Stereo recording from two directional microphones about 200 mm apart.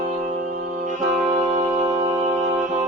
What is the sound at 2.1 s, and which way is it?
Brass instrument, 40° right (ahead or behind).